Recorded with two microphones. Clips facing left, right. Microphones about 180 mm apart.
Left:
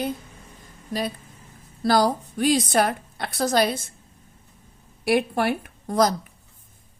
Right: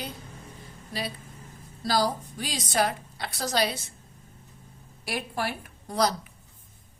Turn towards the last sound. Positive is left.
turn(degrees=50)  # may be behind; listen again after turning